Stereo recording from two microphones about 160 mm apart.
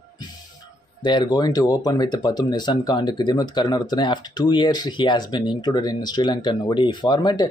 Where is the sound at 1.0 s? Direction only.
30° left (ahead or behind).